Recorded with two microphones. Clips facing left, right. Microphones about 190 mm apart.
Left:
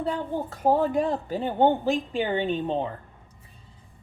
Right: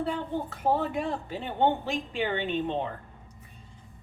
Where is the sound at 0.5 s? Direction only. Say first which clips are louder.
Left 6 dB; 40° left (ahead or behind).